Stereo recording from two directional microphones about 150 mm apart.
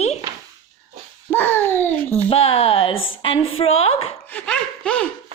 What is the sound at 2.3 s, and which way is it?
A woman's voice, 40° left (ahead or behind).